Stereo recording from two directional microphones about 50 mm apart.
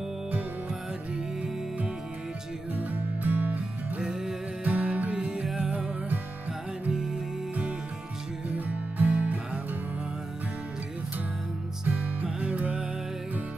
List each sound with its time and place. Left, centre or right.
2.7 s music: right
4.0 s music: centre
4.6 s music: right
6.9 s music: centre
8.5 s music: right
11.9 s music: right